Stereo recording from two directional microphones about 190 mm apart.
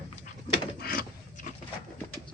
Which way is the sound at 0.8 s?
50° left (ahead or behind).